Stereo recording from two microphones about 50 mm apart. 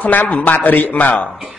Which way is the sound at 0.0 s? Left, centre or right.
Left.